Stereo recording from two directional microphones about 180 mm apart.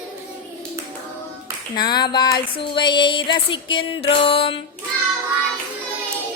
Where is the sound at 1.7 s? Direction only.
25° left (ahead or behind).